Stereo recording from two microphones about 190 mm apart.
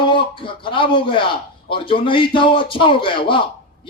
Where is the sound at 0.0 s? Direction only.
25° left (ahead or behind).